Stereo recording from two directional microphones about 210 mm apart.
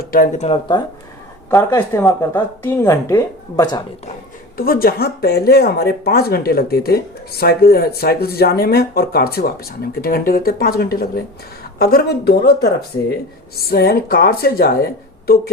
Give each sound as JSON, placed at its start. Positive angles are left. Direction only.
{"t": 0.0, "sound": "speech", "side_deg": 40}
{"t": 1.5, "sound": "a woman's voice", "side_deg": 15}
{"t": 4.5, "sound": "speech", "side_deg": 45}